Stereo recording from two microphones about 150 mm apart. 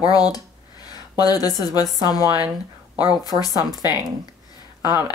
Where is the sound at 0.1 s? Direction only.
25° left (ahead or behind).